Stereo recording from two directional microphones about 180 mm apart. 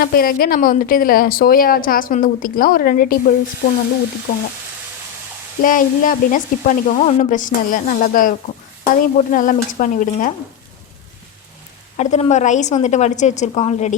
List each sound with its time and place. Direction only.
0.0 s a woman's voice: 55° left (ahead or behind)
3.6 s frying: 75° left (ahead or behind)
5.6 s a woman's voice: 50° left (ahead or behind)
11.9 s a woman's voice: 40° left (ahead or behind)